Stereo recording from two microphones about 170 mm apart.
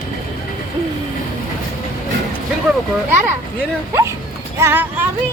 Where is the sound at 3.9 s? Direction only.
15° right (ahead or behind).